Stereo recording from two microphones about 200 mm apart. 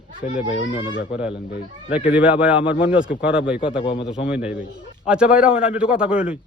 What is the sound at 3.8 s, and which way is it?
Speech, 25° left (ahead or behind).